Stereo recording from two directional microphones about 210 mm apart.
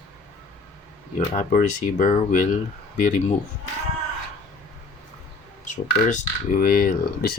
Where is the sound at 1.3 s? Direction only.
35° left (ahead or behind).